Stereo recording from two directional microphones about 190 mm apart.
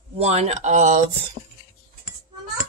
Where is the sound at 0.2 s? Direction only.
35° right (ahead or behind).